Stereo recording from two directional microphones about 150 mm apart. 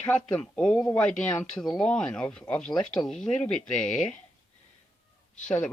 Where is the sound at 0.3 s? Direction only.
5° left (ahead or behind).